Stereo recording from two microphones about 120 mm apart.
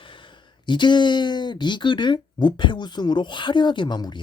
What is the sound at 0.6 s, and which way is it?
Speech, 40° left (ahead or behind).